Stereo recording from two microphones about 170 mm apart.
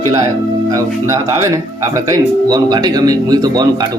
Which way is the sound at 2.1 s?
25° right (ahead or behind).